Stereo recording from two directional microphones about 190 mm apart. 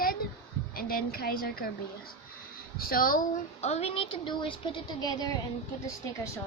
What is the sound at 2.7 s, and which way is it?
Speech, 50° left (ahead or behind).